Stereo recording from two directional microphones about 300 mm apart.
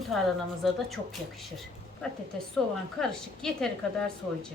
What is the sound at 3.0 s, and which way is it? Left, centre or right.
Speech, centre.